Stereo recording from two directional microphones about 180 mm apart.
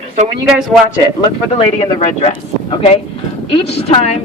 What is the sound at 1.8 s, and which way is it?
A woman's voice, 30° left (ahead or behind).